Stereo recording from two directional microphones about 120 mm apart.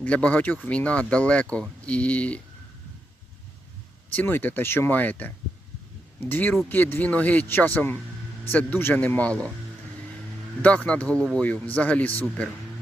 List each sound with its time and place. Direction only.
0.0 s speech: 10° left (ahead or behind)
4.1 s speech: 15° left (ahead or behind)
10.6 s speech: 10° left (ahead or behind)